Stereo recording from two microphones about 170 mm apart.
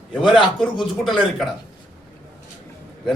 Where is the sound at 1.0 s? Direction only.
Centre (ahead or behind).